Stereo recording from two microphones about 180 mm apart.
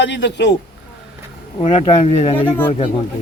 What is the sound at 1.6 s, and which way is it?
Speech, 30° left (ahead or behind).